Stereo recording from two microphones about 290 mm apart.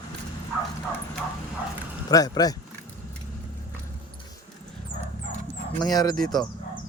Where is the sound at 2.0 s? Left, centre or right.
Centre.